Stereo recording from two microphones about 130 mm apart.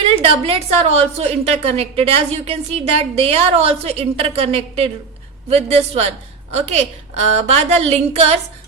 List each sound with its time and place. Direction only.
0.2 s a woman's voice: 50° right (ahead or behind)